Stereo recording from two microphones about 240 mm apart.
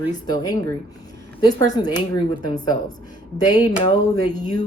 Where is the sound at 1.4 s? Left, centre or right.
Right.